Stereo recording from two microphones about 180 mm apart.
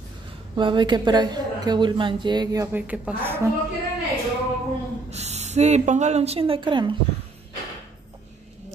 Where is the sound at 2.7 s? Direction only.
5° right (ahead or behind).